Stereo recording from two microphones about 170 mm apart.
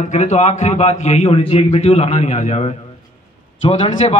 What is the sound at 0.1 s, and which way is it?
A man's voice, 45° left (ahead or behind).